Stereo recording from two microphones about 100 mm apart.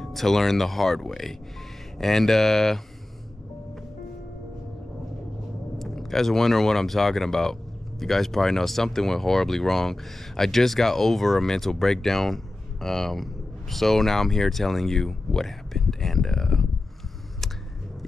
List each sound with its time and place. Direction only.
0.0 s speech: 5° left (ahead or behind)
5.8 s speech: 5° left (ahead or behind)